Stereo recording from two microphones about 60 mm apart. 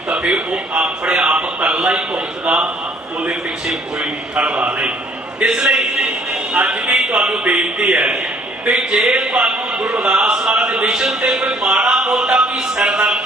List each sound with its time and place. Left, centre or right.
0.1 s a man's voice: centre
4.0 s a man's voice: centre
5.4 s a man's voice: centre
6.1 s a man's voice: right
10.0 s speech: centre